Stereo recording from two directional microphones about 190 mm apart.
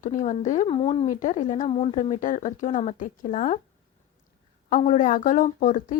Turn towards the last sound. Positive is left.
turn(degrees=45)  # may be behind; listen again after turning